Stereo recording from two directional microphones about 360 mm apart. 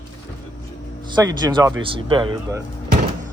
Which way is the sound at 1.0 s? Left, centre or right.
Centre.